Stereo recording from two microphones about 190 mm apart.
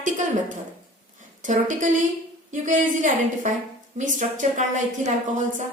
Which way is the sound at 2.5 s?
40° right (ahead or behind).